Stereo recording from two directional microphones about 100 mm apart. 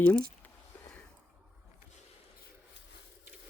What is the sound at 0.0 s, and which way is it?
Speech, 15° left (ahead or behind).